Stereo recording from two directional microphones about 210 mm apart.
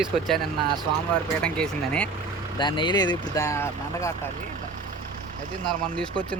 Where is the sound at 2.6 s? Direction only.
20° left (ahead or behind).